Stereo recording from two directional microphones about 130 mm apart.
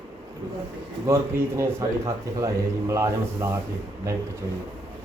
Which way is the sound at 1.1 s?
20° right (ahead or behind).